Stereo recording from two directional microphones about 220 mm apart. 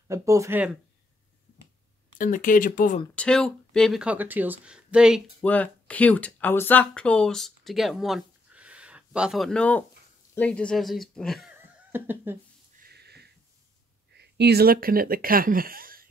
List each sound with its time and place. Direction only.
0.1 s speech: 15° right (ahead or behind)
2.1 s speech: 35° left (ahead or behind)
3.2 s speech: 5° left (ahead or behind)
11.9 s speech: 10° right (ahead or behind)
12.8 s sniff: 45° right (ahead or behind)
14.1 s speech: 50° right (ahead or behind)